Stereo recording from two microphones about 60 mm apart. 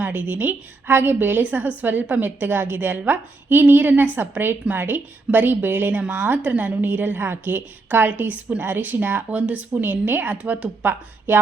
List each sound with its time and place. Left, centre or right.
0.0 s a woman's voice: right